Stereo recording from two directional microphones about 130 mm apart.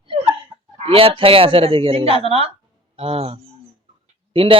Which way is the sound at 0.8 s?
45° right (ahead or behind).